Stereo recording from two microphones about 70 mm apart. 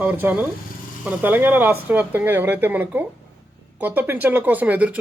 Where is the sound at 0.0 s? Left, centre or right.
Right.